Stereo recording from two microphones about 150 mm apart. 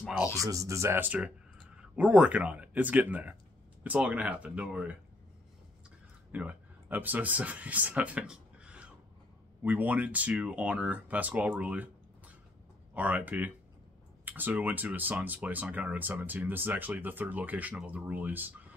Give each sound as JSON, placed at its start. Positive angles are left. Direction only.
{"t": 0.0, "sound": "speech", "side_deg": -5}
{"t": 0.4, "sound": "speech", "side_deg": -20}
{"t": 6.3, "sound": "speech", "side_deg": -10}